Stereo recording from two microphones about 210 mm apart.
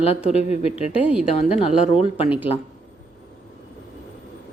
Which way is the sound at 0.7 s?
5° right (ahead or behind).